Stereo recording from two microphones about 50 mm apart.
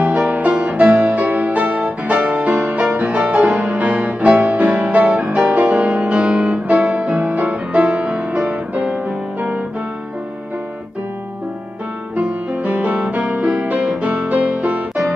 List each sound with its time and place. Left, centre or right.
0.0 s music: right
12.2 s music: right